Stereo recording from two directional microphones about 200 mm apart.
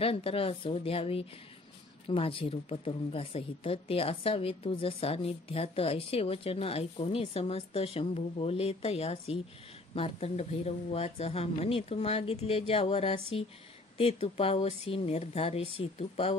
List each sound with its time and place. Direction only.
0.0 s speech: 30° left (ahead or behind)